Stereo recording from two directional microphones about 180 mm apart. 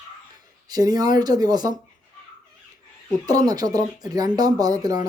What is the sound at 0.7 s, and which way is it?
Speech, 20° right (ahead or behind).